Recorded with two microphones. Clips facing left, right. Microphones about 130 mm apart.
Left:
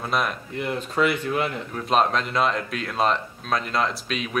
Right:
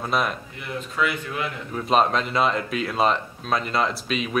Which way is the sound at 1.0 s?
40° left (ahead or behind).